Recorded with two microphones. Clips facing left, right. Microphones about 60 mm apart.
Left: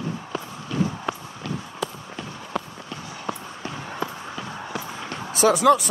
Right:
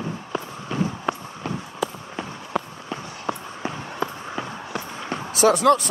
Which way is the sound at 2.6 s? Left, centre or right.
Centre.